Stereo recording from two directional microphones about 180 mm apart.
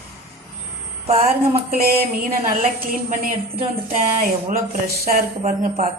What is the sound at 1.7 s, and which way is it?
A woman's voice, 55° right (ahead or behind).